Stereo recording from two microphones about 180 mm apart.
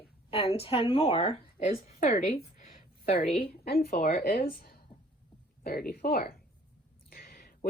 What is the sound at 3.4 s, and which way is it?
Speech, 60° left (ahead or behind).